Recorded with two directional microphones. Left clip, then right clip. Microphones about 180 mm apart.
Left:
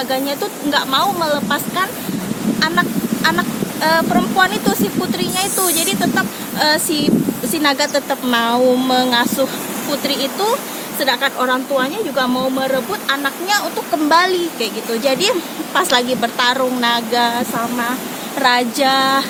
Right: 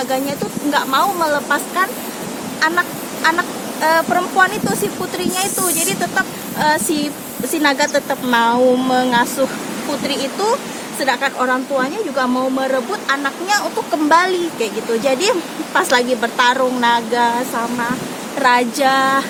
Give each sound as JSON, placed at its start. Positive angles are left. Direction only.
{"t": 0.1, "sound": "speech", "side_deg": -5}
{"t": 5.6, "sound": "speech", "side_deg": -5}
{"t": 11.0, "sound": "speech", "side_deg": 0}
{"t": 14.1, "sound": "speech", "side_deg": -15}
{"t": 18.4, "sound": "speech", "side_deg": -10}